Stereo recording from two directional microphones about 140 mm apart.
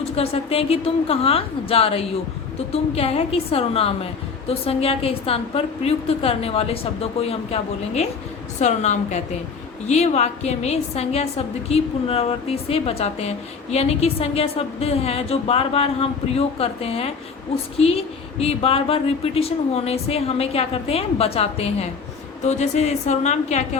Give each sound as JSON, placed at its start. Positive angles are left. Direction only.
{"t": 0.2, "sound": "a woman's voice", "side_deg": 45}